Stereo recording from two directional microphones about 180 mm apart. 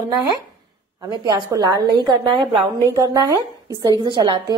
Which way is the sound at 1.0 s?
20° right (ahead or behind).